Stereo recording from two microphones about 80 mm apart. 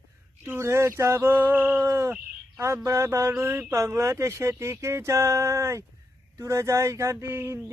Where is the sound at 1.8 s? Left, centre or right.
Right.